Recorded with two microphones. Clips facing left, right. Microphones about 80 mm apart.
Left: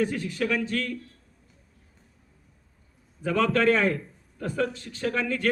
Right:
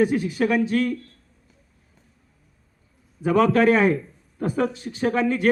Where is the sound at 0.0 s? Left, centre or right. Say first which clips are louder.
Right 6 dB; centre.